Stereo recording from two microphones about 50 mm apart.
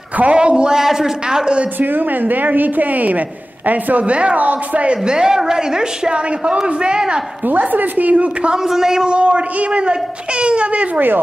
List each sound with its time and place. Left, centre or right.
0.2 s speech: right
1.8 s a woman's voice: right; by 7.2 s centre
7.4 s a woman's voice: right
8.6 s a man's voice: centre